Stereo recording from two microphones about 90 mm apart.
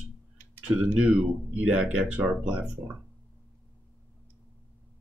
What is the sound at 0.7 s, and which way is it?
Speech, 15° right (ahead or behind).